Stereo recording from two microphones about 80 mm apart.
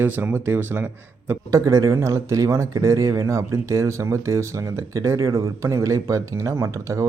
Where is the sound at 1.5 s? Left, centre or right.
Right.